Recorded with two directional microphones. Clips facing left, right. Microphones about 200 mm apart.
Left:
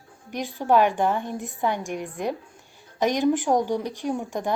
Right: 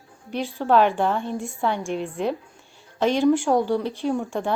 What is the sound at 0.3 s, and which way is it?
A woman's voice, 15° left (ahead or behind).